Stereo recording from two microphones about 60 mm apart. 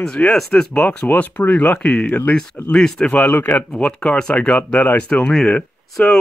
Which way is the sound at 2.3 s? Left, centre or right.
Centre.